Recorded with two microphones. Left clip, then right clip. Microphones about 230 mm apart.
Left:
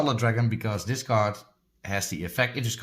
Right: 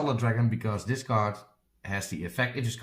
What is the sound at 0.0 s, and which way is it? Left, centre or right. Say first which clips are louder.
Speech: left 4 dB; left.